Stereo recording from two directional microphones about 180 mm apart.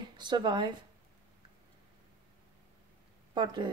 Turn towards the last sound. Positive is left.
turn(degrees=-25)  # may be behind; listen again after turning